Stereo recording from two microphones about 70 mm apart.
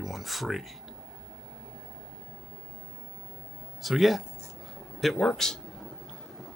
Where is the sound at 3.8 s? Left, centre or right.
Centre.